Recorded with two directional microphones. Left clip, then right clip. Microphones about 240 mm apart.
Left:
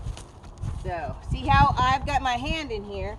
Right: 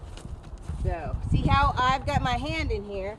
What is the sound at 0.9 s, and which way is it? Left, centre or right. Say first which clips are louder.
Speech: left 2 dB; centre.